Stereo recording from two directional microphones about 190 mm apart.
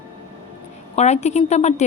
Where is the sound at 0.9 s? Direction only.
35° left (ahead or behind).